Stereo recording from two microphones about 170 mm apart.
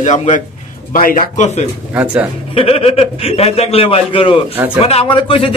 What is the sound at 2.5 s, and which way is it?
A man's voice, 35° left (ahead or behind).